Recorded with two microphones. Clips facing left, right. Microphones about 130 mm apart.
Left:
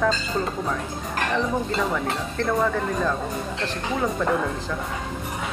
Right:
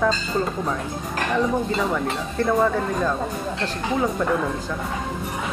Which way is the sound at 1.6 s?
5° right (ahead or behind).